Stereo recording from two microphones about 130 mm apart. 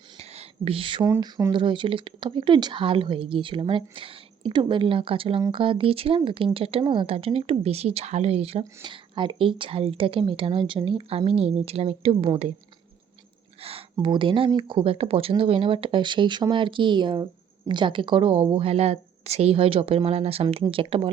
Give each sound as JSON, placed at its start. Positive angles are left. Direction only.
{"t": 0.2, "sound": "a sound", "side_deg": -50}
{"t": 1.2, "sound": "speech", "side_deg": -25}
{"t": 1.5, "sound": "a woman's voice", "side_deg": -40}
{"t": 8.8, "sound": "a woman's voice", "side_deg": -40}
{"t": 13.6, "sound": "a sound", "side_deg": -50}
{"t": 14.0, "sound": "a woman's voice", "side_deg": -40}